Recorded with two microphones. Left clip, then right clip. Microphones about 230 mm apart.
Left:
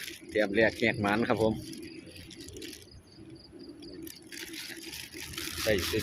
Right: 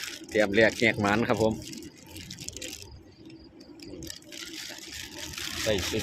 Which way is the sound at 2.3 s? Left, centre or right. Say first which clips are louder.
Right 6 dB; right.